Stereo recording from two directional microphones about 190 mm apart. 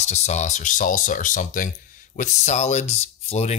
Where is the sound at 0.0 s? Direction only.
35° left (ahead or behind).